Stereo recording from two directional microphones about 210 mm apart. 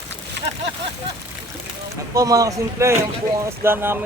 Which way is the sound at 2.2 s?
15° right (ahead or behind).